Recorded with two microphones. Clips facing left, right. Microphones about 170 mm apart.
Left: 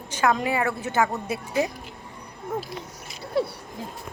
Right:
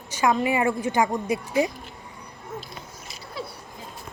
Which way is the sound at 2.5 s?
55° left (ahead or behind).